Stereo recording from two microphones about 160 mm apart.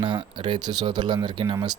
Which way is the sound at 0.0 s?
30° right (ahead or behind).